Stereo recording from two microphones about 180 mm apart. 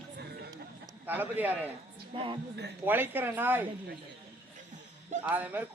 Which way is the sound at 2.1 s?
25° right (ahead or behind).